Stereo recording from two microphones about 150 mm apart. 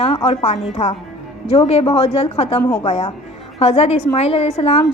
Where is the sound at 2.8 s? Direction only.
45° left (ahead or behind).